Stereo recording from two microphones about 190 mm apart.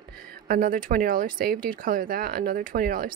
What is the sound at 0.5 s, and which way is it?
A woman's voice, 45° right (ahead or behind).